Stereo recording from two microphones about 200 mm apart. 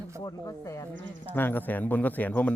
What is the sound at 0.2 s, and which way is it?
Speech, 20° left (ahead or behind).